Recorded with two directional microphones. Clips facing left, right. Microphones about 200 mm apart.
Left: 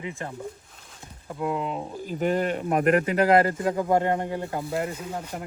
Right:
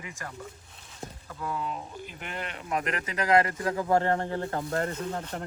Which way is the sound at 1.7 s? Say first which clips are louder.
Left 7 dB; 40° left (ahead or behind).